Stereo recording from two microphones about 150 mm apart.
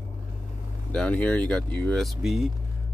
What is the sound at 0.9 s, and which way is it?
Speech, 10° left (ahead or behind).